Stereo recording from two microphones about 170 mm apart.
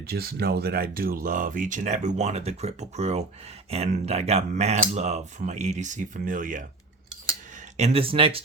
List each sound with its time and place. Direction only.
0.1 s speech: 65° right (ahead or behind)
7.8 s speech: 35° right (ahead or behind)